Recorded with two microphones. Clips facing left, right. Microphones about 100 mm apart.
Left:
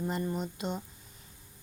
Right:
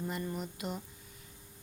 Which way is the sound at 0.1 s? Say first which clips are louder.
Left 4 dB; 30° left (ahead or behind).